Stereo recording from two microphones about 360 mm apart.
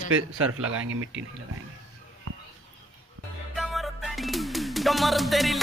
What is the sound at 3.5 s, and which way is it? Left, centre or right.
Music, centre.